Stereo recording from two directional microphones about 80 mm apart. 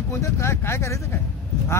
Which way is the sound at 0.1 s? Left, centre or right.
Left.